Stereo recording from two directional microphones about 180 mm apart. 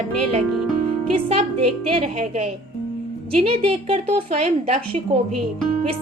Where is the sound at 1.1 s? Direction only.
30° right (ahead or behind).